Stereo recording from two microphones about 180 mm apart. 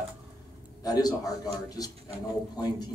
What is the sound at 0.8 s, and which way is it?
A man's voice, 20° left (ahead or behind).